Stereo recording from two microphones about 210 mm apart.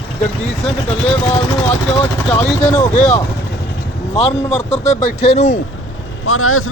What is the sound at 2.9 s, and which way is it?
Speech, 35° left (ahead or behind).